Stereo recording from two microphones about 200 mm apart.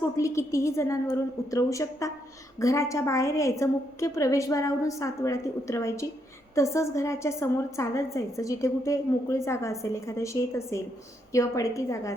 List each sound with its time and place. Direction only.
0.0 s a woman's voice: 15° left (ahead or behind)